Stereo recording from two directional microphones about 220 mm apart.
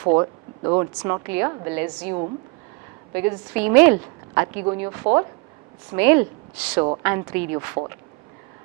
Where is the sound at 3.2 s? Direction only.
10° right (ahead or behind).